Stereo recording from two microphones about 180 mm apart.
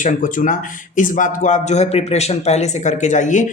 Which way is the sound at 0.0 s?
45° left (ahead or behind).